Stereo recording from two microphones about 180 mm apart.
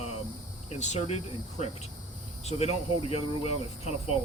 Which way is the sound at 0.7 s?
40° left (ahead or behind).